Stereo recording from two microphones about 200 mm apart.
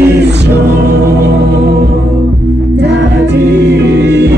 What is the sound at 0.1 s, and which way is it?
Music, 55° right (ahead or behind).